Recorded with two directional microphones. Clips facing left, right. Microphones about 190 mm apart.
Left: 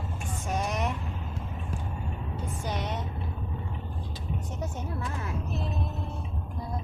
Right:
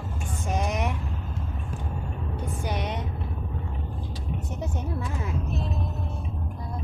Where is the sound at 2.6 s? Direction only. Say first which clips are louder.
Right 2 dB; 15° right (ahead or behind).